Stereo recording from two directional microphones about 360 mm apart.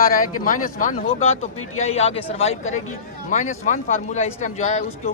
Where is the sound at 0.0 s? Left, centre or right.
Left.